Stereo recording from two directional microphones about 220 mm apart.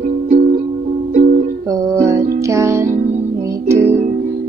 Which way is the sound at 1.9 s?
15° right (ahead or behind).